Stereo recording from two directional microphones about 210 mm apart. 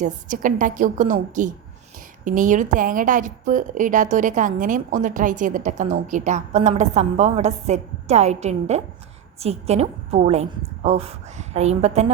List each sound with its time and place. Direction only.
0.0 s a woman's voice: 40° right (ahead or behind)